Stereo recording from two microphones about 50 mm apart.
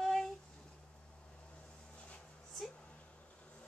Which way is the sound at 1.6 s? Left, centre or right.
Left.